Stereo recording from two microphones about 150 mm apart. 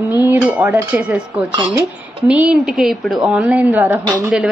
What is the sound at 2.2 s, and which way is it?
Speech, 10° right (ahead or behind).